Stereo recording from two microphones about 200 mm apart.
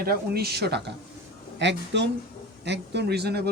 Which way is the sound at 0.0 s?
50° right (ahead or behind).